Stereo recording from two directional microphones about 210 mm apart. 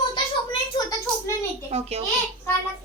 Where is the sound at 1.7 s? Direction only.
30° right (ahead or behind).